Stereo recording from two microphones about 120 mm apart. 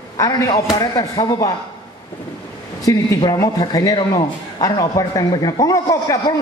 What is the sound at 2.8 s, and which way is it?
A man's voice, 25° left (ahead or behind).